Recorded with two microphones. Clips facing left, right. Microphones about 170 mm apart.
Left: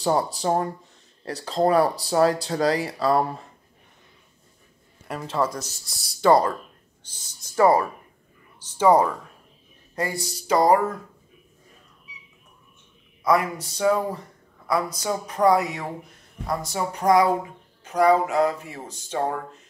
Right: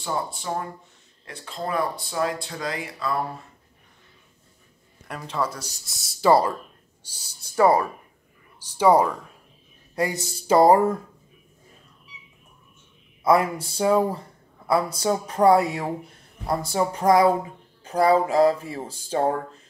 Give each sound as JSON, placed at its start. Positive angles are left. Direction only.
{"t": 0.0, "sound": "speech", "side_deg": 40}
{"t": 5.0, "sound": "speech", "side_deg": 5}
{"t": 8.5, "sound": "speech", "side_deg": -10}
{"t": 10.4, "sound": "speech", "side_deg": -30}
{"t": 13.2, "sound": "speech", "side_deg": -30}